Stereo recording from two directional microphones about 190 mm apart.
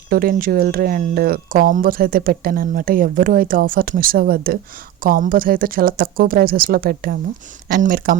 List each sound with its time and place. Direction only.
0.1 s speech: 50° right (ahead or behind)